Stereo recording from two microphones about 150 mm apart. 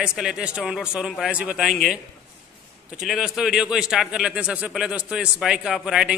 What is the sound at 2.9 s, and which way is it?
A man's voice, 5° right (ahead or behind).